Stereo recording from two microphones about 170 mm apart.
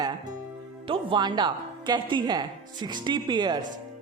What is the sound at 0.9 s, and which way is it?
A woman's voice, 30° right (ahead or behind).